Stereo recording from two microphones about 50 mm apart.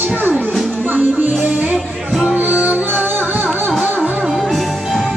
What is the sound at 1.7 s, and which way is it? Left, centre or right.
Music, centre.